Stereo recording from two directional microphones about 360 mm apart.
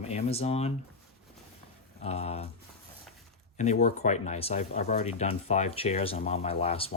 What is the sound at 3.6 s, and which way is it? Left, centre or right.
Speech, centre.